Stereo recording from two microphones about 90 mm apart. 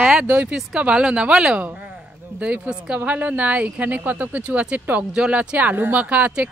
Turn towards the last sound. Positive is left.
turn(degrees=-15)  # may be behind; listen again after turning